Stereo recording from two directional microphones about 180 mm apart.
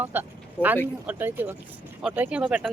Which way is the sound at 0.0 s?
10° right (ahead or behind).